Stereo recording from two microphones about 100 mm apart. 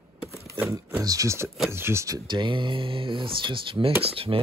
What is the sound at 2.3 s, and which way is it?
Speech, 55° right (ahead or behind).